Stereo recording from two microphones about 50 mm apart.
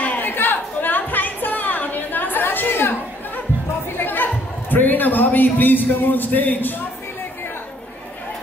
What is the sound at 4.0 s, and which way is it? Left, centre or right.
Chatter, left.